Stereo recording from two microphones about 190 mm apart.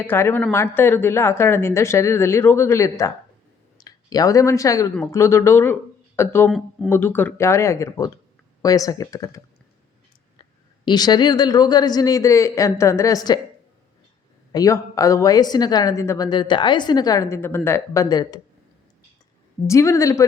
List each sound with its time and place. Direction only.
0.0 s a woman's voice: 10° left (ahead or behind)
10.8 s a woman's voice: 20° left (ahead or behind)
14.5 s a woman's voice: 20° left (ahead or behind)
19.6 s a woman's voice: 15° left (ahead or behind)